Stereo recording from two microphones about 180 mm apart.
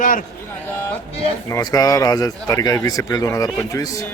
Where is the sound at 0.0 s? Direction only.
45° left (ahead or behind).